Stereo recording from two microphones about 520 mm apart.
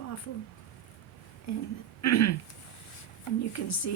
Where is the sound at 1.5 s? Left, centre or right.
Left.